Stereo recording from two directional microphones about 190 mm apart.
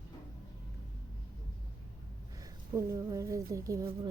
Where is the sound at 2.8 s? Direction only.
15° right (ahead or behind).